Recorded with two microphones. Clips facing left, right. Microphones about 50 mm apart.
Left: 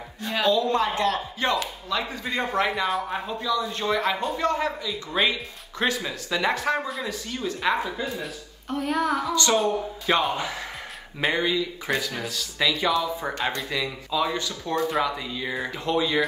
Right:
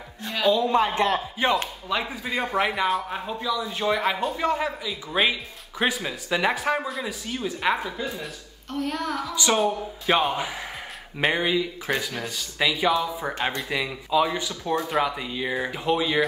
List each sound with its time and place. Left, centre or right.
0.2 s a sound: centre
0.5 s speech: centre
8.6 s speech: centre
9.3 s speech: centre
13.3 s speech: right
14.9 s speech: centre
15.1 s speech: centre